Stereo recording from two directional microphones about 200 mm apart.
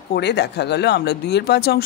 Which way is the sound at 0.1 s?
55° left (ahead or behind).